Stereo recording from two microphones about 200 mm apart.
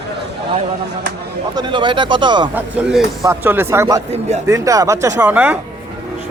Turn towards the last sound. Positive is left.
turn(degrees=-10)  # may be behind; listen again after turning